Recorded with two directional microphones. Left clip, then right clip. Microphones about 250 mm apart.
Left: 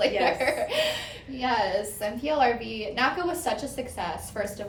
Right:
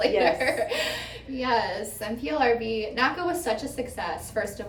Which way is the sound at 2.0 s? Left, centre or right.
Centre.